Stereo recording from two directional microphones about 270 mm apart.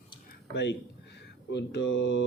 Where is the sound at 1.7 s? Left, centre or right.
Left.